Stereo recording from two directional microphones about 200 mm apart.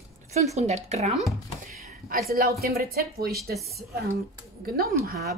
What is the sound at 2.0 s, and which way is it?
Speech, 50° right (ahead or behind).